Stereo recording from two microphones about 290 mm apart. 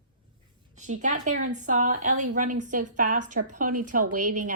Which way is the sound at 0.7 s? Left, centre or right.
Right.